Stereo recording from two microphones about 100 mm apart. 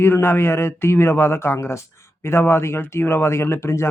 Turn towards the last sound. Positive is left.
turn(degrees=25)  # may be behind; listen again after turning